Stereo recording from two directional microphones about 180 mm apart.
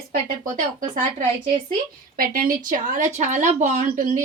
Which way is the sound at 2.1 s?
50° right (ahead or behind).